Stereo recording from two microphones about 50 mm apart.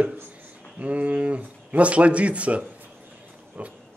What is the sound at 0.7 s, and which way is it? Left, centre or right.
A man's voice, right.